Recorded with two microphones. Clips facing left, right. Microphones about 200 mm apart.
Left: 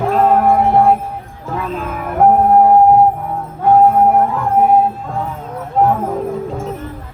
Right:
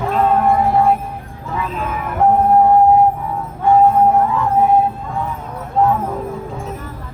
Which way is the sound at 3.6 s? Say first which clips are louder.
Left 2 dB; 60° left (ahead or behind).